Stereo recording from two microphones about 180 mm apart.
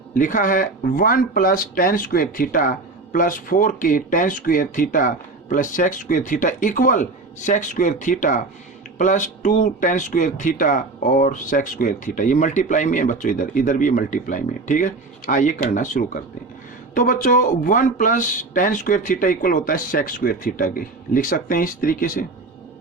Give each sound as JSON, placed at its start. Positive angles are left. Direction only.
{"t": 0.1, "sound": "speech", "side_deg": 45}